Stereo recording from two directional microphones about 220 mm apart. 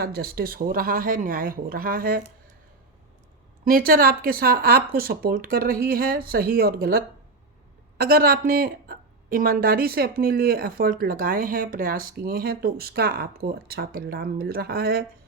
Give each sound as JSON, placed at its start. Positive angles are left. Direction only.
{"t": 0.0, "sound": "speech", "side_deg": -45}
{"t": 3.6, "sound": "a woman's voice", "side_deg": -40}